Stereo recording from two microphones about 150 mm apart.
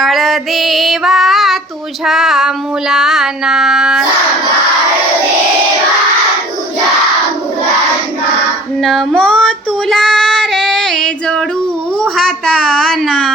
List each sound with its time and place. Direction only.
0.0 s female singing: centre (ahead or behind)
2.0 s music: centre (ahead or behind)
8.8 s child singing: centre (ahead or behind)
11.9 s a sound: 5° left (ahead or behind)